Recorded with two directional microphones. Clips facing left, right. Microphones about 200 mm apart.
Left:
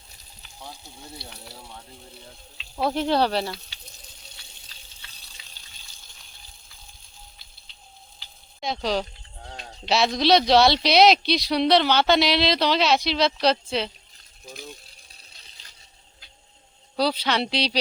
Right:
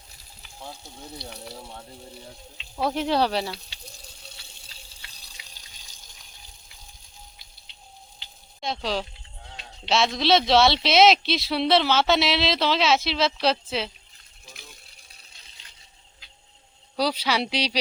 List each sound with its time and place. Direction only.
2.9 s speech: 5° right (ahead or behind)
5.0 s water: 10° right (ahead or behind)
8.6 s speech: centre (ahead or behind)
9.5 s sheep: 45° left (ahead or behind)
9.9 s speech: centre (ahead or behind)
14.4 s speech: 35° left (ahead or behind)
17.0 s speech: 10° right (ahead or behind)